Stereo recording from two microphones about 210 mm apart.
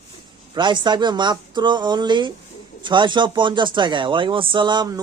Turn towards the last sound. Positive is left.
turn(degrees=-20)  # may be behind; listen again after turning